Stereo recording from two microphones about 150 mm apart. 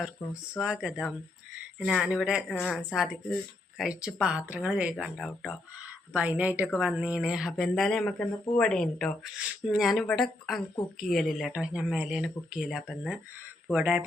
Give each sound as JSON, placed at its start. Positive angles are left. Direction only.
{"t": 0.2, "sound": "speech", "side_deg": 15}
{"t": 0.6, "sound": "a woman's voice", "side_deg": -5}